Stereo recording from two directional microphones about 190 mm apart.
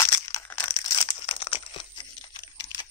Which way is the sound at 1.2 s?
30° left (ahead or behind).